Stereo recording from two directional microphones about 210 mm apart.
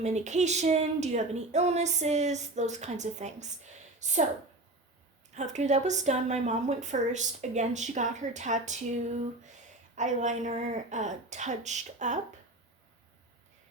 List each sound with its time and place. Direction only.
0.0 s speech: 35° right (ahead or behind)
5.3 s speech: 35° right (ahead or behind)
9.9 s speech: 35° right (ahead or behind)